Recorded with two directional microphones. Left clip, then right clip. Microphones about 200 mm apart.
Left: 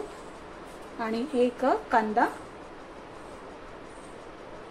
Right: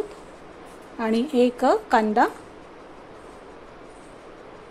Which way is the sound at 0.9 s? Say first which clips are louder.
Right 6 dB; 55° right (ahead or behind).